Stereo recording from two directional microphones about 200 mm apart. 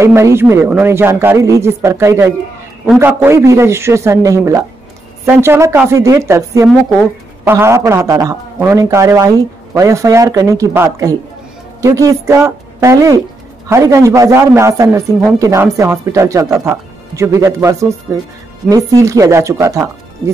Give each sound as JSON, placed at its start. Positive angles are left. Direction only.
{"t": 0.0, "sound": "a man's voice", "side_deg": -15}